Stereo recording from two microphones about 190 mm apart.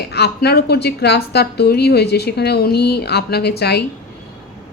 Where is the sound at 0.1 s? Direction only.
60° left (ahead or behind).